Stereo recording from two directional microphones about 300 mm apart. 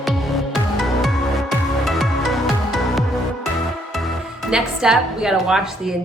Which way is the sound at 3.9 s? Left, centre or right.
Centre.